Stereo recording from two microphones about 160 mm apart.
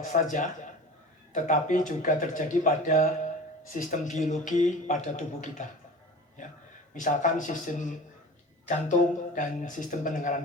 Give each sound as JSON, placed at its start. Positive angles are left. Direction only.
{"t": 0.1, "sound": "speech", "side_deg": 55}
{"t": 6.9, "sound": "speech", "side_deg": 55}